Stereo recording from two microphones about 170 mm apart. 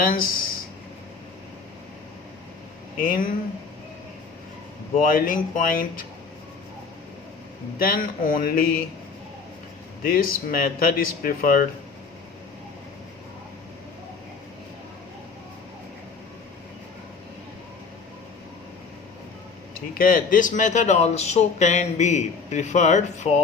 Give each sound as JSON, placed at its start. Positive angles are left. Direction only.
{"t": 0.1, "sound": "speech", "side_deg": 60}
{"t": 3.0, "sound": "speech", "side_deg": 55}
{"t": 5.0, "sound": "speech", "side_deg": 55}
{"t": 7.8, "sound": "speech", "side_deg": 60}
{"t": 10.0, "sound": "speech", "side_deg": 60}
{"t": 19.9, "sound": "a man's voice", "side_deg": 55}